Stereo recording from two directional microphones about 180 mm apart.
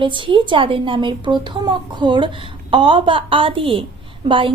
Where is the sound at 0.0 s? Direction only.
30° right (ahead or behind).